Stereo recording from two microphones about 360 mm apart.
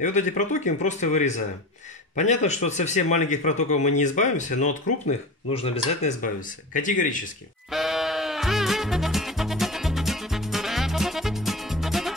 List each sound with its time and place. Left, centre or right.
0.0 s speech: centre
7.7 s music: centre